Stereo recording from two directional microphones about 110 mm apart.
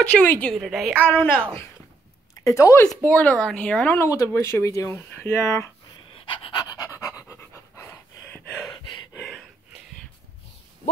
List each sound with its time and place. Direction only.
0.0 s speech: 15° left (ahead or behind)
0.6 s a woman's voice: centre (ahead or behind)
1.0 s speech: 15° left (ahead or behind)
2.3 s speech: 30° left (ahead or behind)
3.0 s speech: 15° left (ahead or behind)
6.1 s pant: 50° left (ahead or behind); by 8.0 s 25° left (ahead or behind)
8.6 s a sound: 35° left (ahead or behind)